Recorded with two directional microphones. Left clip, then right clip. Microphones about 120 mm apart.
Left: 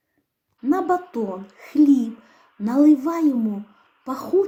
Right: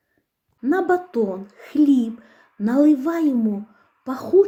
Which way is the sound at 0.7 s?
20° right (ahead or behind).